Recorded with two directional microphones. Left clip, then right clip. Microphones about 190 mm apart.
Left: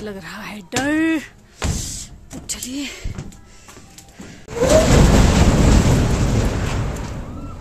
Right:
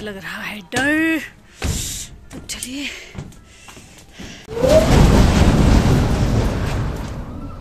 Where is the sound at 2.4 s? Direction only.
20° left (ahead or behind).